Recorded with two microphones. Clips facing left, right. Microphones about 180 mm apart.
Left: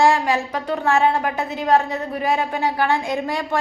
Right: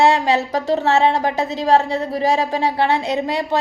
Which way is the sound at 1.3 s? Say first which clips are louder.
Right 4 dB; 90° right.